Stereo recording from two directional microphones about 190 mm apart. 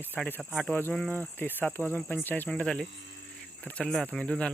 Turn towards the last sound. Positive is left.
turn(degrees=5)  # may be behind; listen again after turning